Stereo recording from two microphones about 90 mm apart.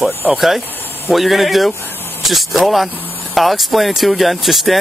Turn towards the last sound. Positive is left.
turn(degrees=0)  # may be behind; listen again after turning